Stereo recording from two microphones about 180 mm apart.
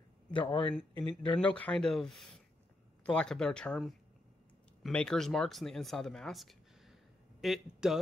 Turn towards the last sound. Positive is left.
turn(degrees=0)  # may be behind; listen again after turning